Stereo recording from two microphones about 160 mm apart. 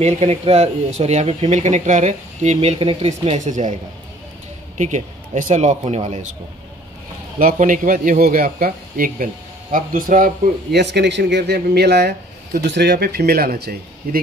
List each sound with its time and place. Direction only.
0.0 s speech: 40° right (ahead or behind)
4.7 s speech: 50° right (ahead or behind)
7.3 s a man's voice: 60° right (ahead or behind)